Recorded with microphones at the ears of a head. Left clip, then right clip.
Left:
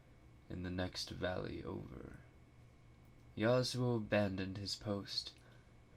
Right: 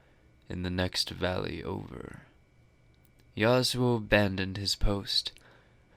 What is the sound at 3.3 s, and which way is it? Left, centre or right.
Speech, right.